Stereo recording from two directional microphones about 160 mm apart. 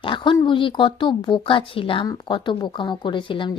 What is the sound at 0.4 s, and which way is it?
Speech, 30° left (ahead or behind).